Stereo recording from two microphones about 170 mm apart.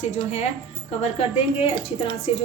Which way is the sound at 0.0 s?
40° left (ahead or behind).